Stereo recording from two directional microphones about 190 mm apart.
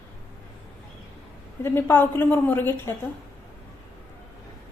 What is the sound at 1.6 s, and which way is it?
A woman's voice, 10° left (ahead or behind).